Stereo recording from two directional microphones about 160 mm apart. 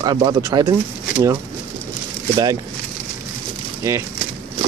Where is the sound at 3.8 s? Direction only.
15° right (ahead or behind).